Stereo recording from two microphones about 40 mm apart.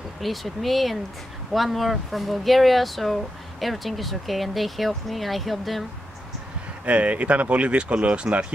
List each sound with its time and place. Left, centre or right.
0.2 s speech: centre
6.9 s speech: right